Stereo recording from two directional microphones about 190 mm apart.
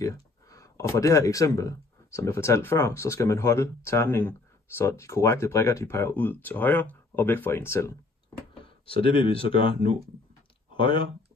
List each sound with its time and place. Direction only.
0.0 s speech: 15° left (ahead or behind)
8.8 s speech: 30° left (ahead or behind)
10.7 s a sound: 25° left (ahead or behind)